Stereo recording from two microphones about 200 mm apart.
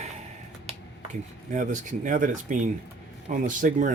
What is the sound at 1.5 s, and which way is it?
Speech, 40° right (ahead or behind).